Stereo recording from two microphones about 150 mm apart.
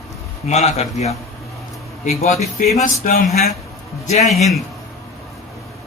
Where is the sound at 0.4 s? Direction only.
45° left (ahead or behind).